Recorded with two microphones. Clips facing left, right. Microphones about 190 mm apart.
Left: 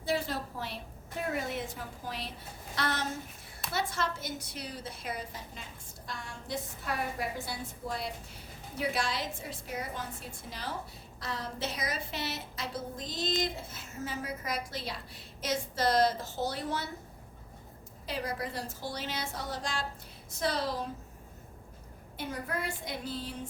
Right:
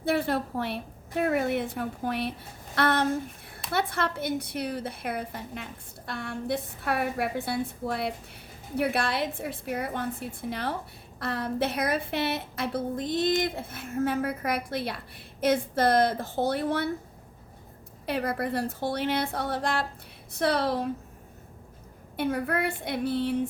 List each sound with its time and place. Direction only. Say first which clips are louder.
0.0 s a woman's voice: right 6 dB; 60° right (ahead or behind)
18.0 s a woman's voice: right 7 dB; 60° right (ahead or behind)
22.2 s a woman's voice: right 9 dB; 60° right (ahead or behind)